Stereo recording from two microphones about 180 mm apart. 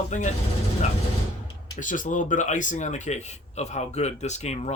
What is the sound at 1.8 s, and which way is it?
Speech, 45° left (ahead or behind).